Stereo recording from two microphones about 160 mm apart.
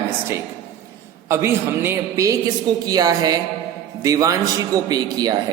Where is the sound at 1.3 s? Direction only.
15° right (ahead or behind).